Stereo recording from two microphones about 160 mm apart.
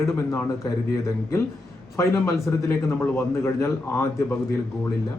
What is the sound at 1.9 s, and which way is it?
Speech, 15° left (ahead or behind).